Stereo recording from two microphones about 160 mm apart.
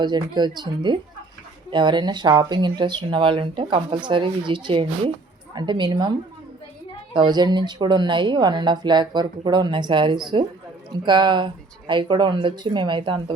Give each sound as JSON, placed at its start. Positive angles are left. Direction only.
{"t": 0.0, "sound": "speech", "side_deg": -25}